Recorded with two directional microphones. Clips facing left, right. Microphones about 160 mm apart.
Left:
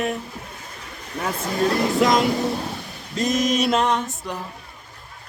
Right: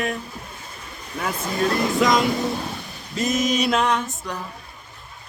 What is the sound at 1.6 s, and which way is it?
Speech, 65° left (ahead or behind).